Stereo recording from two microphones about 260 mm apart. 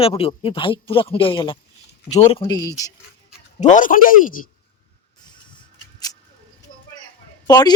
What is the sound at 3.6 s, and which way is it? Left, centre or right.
Speech, left.